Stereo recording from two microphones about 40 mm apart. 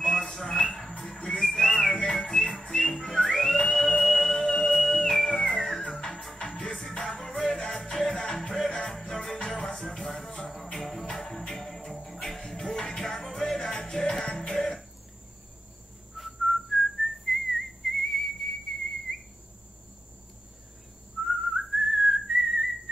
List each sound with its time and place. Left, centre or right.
0.0 s a sound: centre
1.2 s whistling: centre
1.9 s whistling: left
2.3 s music: centre
5.3 s music: left
5.6 s music: centre
6.7 s music: centre
8.6 s music: centre
14.5 s cough: centre
16.2 s whistling: centre
21.3 s whistling: centre